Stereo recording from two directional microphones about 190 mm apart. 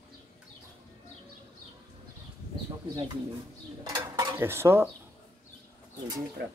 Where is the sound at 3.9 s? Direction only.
20° right (ahead or behind).